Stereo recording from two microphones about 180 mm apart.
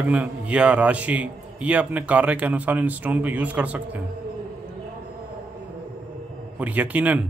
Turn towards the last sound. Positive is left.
turn(degrees=-10)  # may be behind; listen again after turning